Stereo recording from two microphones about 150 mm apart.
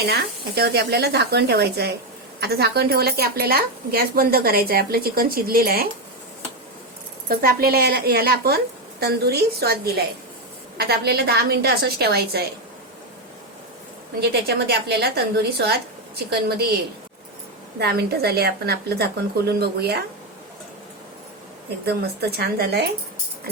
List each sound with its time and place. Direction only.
0.0 s a woman's voice: 90° right
7.3 s a woman's voice: 85° right
14.2 s a woman's voice: 90° right
17.7 s a woman's voice: 90° right
21.8 s a woman's voice: 90° right